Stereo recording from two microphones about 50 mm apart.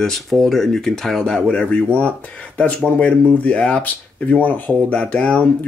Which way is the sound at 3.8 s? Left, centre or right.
Left.